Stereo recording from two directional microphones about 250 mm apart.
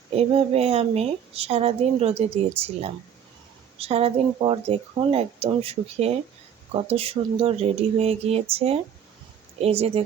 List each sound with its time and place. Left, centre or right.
0.1 s a woman's voice: right